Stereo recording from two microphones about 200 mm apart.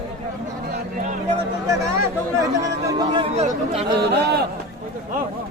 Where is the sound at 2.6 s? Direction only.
20° right (ahead or behind).